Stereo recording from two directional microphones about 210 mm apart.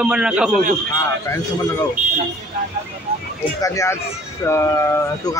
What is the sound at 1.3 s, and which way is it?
Speech, 15° left (ahead or behind).